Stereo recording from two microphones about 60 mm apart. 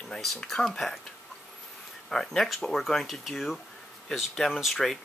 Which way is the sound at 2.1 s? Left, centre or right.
Centre.